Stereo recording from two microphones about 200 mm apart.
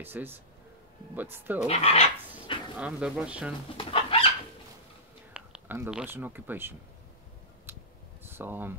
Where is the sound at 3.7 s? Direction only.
25° left (ahead or behind).